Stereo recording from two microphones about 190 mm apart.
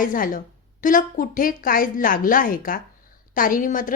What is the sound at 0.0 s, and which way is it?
A woman's voice, 45° left (ahead or behind).